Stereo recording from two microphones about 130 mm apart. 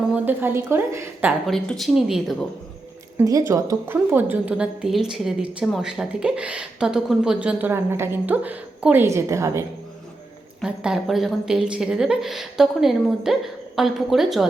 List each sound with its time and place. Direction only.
0.1 s a woman's voice: 15° right (ahead or behind)
1.5 s a woman's voice: centre (ahead or behind)
3.2 s a woman's voice: 25° right (ahead or behind)
10.6 s a woman's voice: 5° right (ahead or behind)